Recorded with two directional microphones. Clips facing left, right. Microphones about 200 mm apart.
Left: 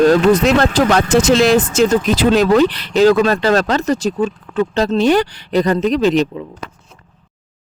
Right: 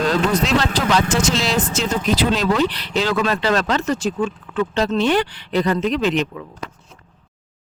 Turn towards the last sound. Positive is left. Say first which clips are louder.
# left 5 dB
turn(degrees=35)  # may be behind; listen again after turning